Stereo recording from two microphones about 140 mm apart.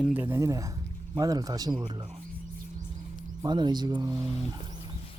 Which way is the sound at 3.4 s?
30° right (ahead or behind).